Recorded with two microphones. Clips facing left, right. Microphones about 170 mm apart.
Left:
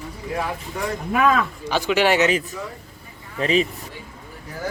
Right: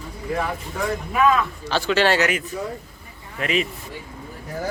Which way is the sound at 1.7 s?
15° left (ahead or behind).